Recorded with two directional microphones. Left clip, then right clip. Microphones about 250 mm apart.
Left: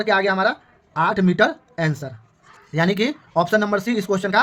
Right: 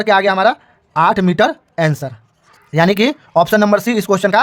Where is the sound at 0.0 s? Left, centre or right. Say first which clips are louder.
Right 6 dB; right.